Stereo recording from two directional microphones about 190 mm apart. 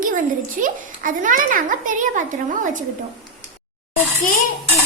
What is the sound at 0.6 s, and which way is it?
A child's voice, 45° right (ahead or behind).